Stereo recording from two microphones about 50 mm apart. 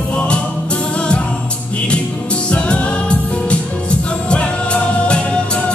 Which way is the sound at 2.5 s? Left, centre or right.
Left.